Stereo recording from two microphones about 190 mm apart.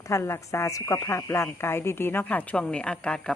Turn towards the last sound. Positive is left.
turn(degrees=5)  # may be behind; listen again after turning